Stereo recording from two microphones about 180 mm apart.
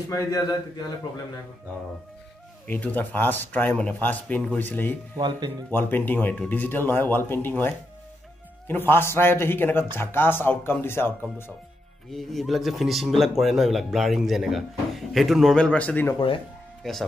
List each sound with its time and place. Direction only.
0.1 s a man's voice: 20° left (ahead or behind)
2.6 s speech: 10° left (ahead or behind)
12.1 s speech: centre (ahead or behind)